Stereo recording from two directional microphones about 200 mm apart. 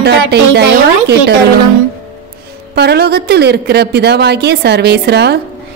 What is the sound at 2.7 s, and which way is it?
A woman's voice, 55° right (ahead or behind).